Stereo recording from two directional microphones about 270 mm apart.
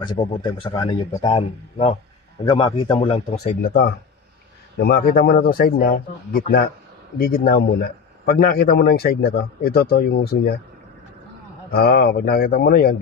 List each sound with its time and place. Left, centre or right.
0.0 s a man's voice: centre
3.6 s a man's voice: left
11.7 s a man's voice: left